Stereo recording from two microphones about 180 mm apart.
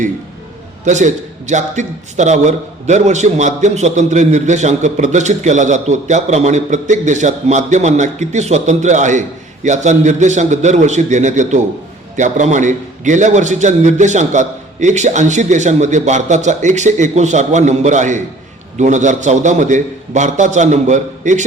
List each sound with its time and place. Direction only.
0.9 s a man's voice: 40° right (ahead or behind)